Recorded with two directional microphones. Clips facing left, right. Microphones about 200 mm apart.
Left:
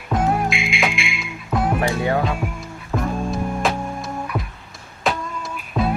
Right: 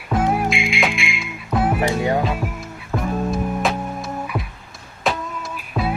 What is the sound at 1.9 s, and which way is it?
Music, 15° right (ahead or behind).